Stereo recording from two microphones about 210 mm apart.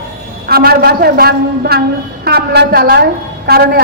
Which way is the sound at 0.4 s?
45° right (ahead or behind).